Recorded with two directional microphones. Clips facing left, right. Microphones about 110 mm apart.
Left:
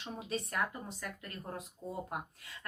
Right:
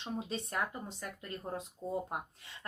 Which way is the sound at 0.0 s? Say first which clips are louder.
Right 1 dB; 25° right (ahead or behind).